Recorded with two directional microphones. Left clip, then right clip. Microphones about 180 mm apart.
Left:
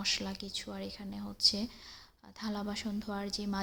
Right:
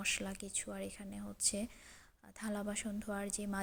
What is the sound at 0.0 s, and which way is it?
Speech, 20° right (ahead or behind).